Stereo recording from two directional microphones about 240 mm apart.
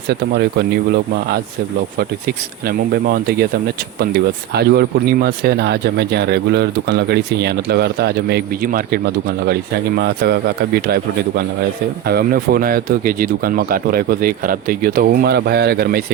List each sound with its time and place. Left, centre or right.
0.1 s speech: right
2.0 s speech: right